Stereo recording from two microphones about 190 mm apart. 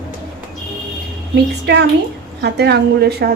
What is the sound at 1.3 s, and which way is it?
A woman's voice, 60° right (ahead or behind).